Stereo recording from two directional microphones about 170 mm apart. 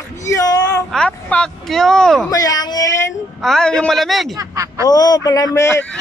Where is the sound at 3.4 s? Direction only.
5° left (ahead or behind).